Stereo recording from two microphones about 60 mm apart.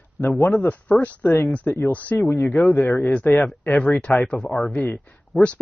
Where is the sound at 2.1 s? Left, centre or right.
Left.